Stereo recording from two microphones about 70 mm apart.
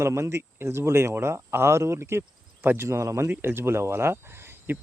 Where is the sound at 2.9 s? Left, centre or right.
Right.